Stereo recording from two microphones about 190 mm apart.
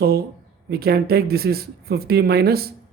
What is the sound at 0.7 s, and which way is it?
Speech, 55° right (ahead or behind).